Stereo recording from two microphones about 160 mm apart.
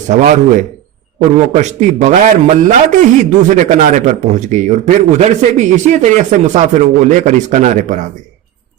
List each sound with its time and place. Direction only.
0.1 s speech: 50° right (ahead or behind)